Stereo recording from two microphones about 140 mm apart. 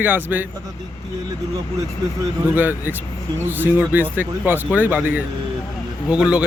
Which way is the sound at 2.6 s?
15° right (ahead or behind).